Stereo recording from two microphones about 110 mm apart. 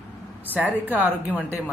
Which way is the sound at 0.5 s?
15° right (ahead or behind).